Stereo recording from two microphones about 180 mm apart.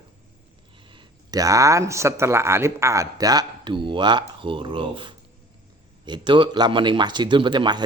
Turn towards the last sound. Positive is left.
turn(degrees=-25)  # may be behind; listen again after turning